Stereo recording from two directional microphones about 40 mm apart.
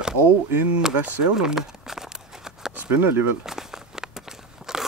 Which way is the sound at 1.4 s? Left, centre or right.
Centre.